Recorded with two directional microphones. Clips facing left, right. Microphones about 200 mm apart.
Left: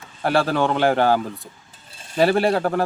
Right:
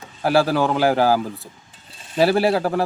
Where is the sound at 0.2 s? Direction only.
Centre (ahead or behind).